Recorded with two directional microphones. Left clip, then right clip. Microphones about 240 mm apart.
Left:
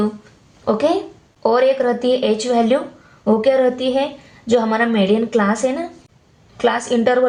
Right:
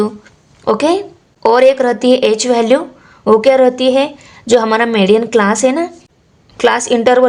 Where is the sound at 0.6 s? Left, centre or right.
Right.